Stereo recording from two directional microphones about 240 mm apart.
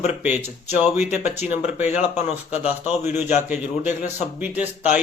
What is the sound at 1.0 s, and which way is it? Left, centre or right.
Speech, left.